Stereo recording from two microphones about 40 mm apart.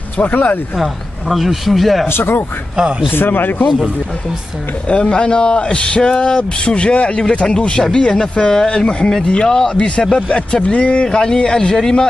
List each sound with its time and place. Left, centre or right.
0.2 s speech: left
1.3 s speech: centre
2.0 s a man's voice: left
3.1 s speech: left
4.8 s speech: left
8.6 s speech: left